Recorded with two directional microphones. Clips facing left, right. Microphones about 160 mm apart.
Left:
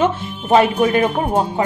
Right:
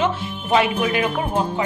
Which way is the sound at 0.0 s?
40° left (ahead or behind).